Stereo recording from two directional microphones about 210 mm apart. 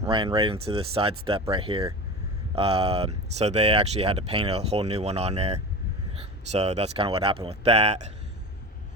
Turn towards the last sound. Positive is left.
turn(degrees=-30)  # may be behind; listen again after turning